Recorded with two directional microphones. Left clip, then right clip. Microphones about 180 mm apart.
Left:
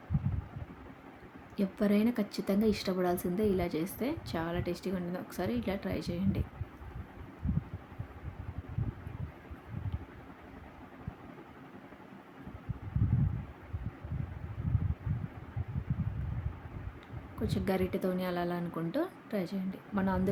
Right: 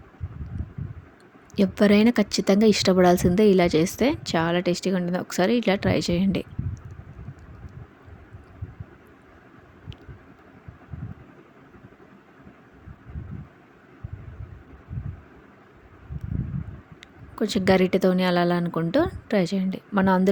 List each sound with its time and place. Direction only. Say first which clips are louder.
1.5 s speech: right 12 dB; 50° right (ahead or behind)
17.4 s speech: right 13 dB; 50° right (ahead or behind)